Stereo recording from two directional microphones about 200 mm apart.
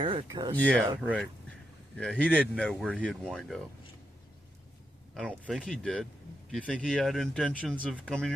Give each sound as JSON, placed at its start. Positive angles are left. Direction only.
{"t": 0.0, "sound": "speech", "side_deg": -25}
{"t": 0.5, "sound": "speech", "side_deg": 5}
{"t": 1.0, "sound": "speech", "side_deg": -5}
{"t": 2.0, "sound": "speech", "side_deg": 5}
{"t": 5.1, "sound": "speech", "side_deg": 0}